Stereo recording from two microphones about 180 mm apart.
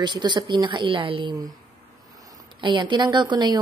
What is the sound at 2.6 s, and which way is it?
A woman's voice, 25° right (ahead or behind).